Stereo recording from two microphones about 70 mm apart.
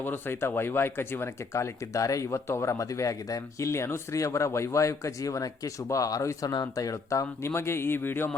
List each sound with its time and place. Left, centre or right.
0.0 s speech: left
3.7 s speech: left
7.5 s speech: left